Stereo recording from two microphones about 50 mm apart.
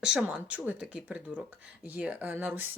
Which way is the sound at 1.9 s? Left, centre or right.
Right.